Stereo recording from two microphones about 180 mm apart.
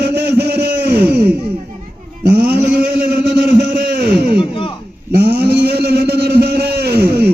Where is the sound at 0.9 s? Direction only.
10° right (ahead or behind).